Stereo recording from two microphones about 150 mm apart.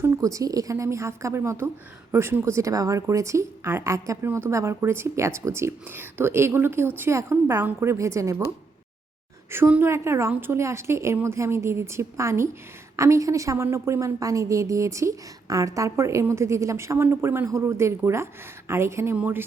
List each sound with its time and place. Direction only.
0.0 s a woman's voice: 20° right (ahead or behind)
9.5 s a woman's voice: 15° right (ahead or behind)